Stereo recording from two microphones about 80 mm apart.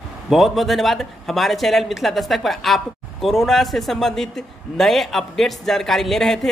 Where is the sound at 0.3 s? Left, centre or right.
Centre.